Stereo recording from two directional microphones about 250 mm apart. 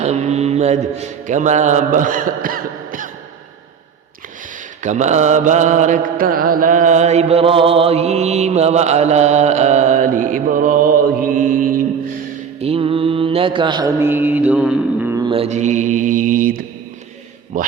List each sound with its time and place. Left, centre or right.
0.0 s mantra: right
4.8 s mantra: right
12.5 s mantra: right
15.3 s mantra: right
17.5 s speech: right